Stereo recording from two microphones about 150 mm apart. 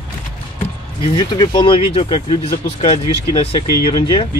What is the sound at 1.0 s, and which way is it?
Speech, 30° left (ahead or behind).